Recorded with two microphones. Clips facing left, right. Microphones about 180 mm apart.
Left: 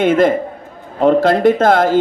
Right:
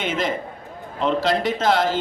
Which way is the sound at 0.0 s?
55° left (ahead or behind).